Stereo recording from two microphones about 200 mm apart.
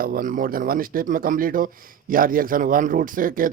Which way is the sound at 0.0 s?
45° right (ahead or behind).